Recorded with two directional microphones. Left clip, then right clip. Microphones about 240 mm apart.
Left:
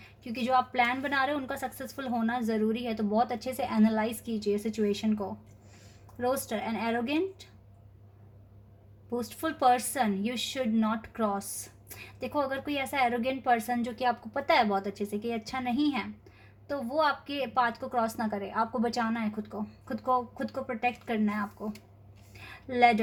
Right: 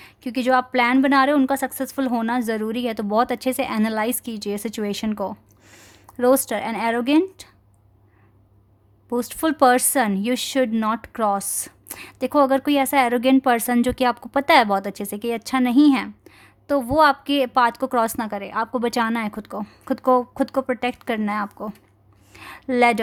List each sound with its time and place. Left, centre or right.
0.2 s speech: right
9.1 s a woman's voice: right